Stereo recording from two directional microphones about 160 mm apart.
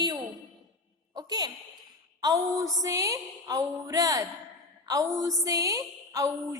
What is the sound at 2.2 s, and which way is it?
A woman's voice, 20° right (ahead or behind).